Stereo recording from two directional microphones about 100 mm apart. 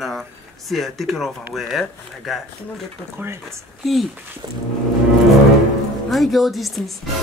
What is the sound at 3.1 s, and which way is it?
Speech, 25° right (ahead or behind).